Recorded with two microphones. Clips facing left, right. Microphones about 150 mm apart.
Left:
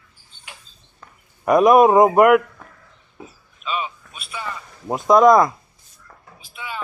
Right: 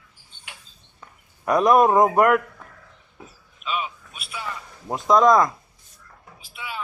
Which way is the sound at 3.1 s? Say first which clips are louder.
Left 5 dB; centre (ahead or behind).